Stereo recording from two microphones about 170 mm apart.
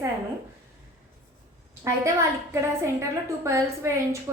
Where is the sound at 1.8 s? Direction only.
20° right (ahead or behind).